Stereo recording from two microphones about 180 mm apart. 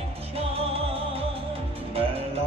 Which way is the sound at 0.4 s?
35° right (ahead or behind).